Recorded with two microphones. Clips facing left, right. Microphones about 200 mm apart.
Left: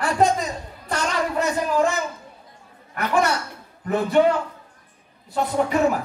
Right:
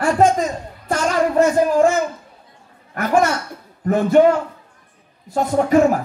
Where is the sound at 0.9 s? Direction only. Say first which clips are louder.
Right 6 dB; 45° right (ahead or behind).